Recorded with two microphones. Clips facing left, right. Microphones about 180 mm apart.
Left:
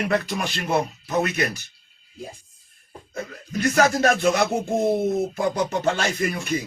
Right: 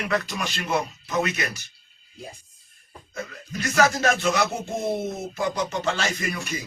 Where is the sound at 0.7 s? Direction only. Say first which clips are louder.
Left 3 dB; 35° left (ahead or behind).